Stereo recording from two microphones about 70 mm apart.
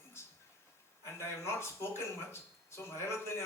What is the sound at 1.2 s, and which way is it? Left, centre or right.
Speech, left.